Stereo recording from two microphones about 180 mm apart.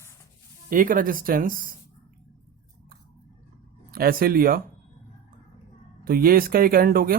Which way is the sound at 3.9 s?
55° right (ahead or behind).